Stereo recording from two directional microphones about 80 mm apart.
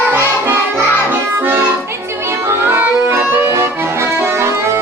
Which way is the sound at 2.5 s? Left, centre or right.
Right.